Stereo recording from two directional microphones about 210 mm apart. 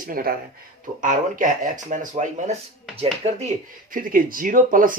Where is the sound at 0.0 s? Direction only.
45° right (ahead or behind); by 3.5 s 30° right (ahead or behind).